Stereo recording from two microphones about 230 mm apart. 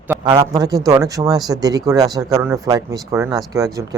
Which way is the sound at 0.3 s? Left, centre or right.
Centre.